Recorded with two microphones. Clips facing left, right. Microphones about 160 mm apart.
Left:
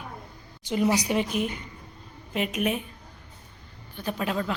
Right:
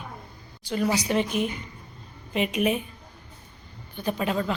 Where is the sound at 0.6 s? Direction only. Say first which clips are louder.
Left 1 dB; 20° left (ahead or behind).